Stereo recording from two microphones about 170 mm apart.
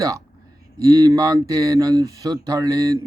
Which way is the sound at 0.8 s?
20° right (ahead or behind).